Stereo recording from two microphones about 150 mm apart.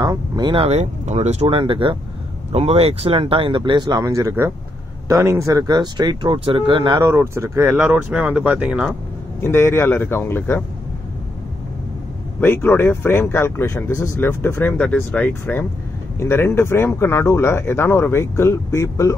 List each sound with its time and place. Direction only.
0.0 s speech: 30° right (ahead or behind)
0.7 s speech: 45° right (ahead or behind); by 7.1 s 30° right (ahead or behind)
7.1 s speech: 20° right (ahead or behind)
9.4 s speech: 15° left (ahead or behind)
12.4 s speech: 15° left (ahead or behind)